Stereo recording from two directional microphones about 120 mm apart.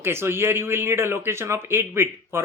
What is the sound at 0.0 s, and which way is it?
Speech, 20° right (ahead or behind).